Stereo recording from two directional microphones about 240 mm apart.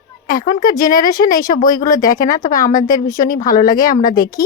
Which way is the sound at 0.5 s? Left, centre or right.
Left.